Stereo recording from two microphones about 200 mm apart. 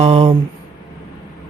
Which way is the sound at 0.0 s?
30° right (ahead or behind).